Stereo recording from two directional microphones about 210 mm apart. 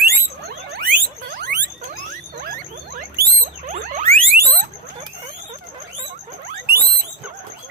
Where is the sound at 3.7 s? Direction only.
40° right (ahead or behind).